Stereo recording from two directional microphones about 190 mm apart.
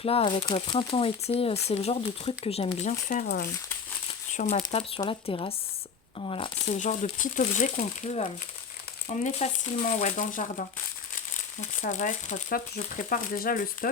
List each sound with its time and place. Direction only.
0.0 s speech: 30° left (ahead or behind)
3.1 s speech: 45° left (ahead or behind)
4.4 s speech: 35° left (ahead or behind)
4.6 s speech: 25° left (ahead or behind); by 10.7 s 45° left (ahead or behind)
11.8 s speech: 40° left (ahead or behind)